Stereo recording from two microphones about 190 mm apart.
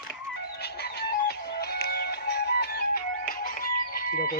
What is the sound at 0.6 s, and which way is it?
Music, 60° left (ahead or behind).